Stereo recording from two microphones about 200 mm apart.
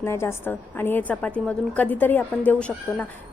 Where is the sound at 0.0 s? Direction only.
10° left (ahead or behind).